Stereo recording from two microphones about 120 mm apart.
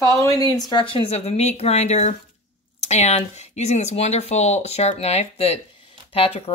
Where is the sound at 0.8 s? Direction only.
50° left (ahead or behind).